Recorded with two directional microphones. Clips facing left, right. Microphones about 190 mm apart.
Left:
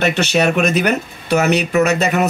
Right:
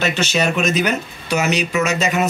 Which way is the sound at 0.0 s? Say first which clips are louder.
Left 4 dB; 60° left (ahead or behind).